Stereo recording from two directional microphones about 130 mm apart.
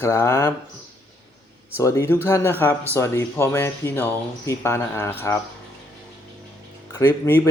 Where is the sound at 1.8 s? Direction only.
20° left (ahead or behind).